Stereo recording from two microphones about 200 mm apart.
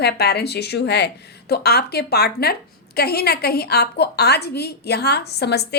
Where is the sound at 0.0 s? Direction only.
55° left (ahead or behind).